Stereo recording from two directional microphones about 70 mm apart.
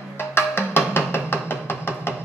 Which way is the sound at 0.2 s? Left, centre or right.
Left.